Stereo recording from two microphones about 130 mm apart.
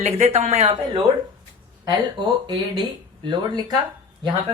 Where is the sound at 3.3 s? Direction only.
35° right (ahead or behind).